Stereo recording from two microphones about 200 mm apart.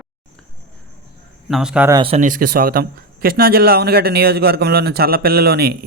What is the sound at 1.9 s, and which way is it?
Speech, 25° right (ahead or behind).